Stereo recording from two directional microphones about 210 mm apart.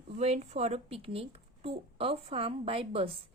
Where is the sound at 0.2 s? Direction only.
30° right (ahead or behind).